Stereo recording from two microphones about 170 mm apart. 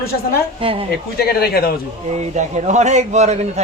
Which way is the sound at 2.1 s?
40° right (ahead or behind).